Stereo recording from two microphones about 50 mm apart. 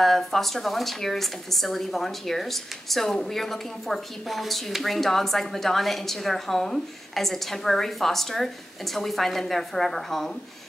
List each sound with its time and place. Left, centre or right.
0.0 s a woman's voice: centre